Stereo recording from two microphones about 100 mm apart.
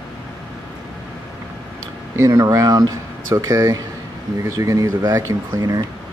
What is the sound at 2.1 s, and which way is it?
Speech, 30° right (ahead or behind).